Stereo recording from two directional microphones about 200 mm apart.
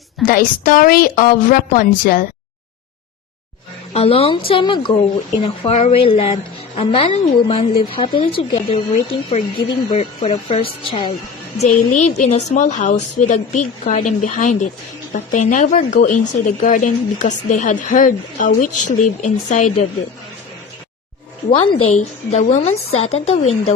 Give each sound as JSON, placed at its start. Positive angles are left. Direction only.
{"t": 0.2, "sound": "a woman's voice", "side_deg": 45}
{"t": 3.9, "sound": "a woman's voice", "side_deg": 30}
{"t": 11.6, "sound": "a woman's voice", "side_deg": 35}
{"t": 21.5, "sound": "a woman's voice", "side_deg": 25}